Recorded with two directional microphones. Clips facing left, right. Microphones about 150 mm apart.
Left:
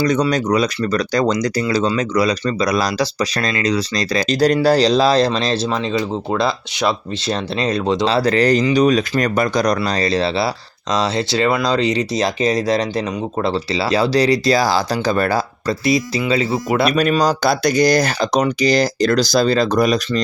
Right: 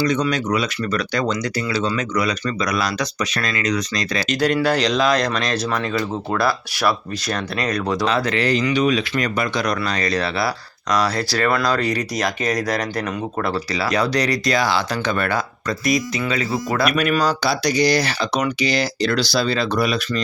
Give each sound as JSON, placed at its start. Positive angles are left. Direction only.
{"t": 0.0, "sound": "speech", "side_deg": 40}
{"t": 17.2, "sound": "speech", "side_deg": 50}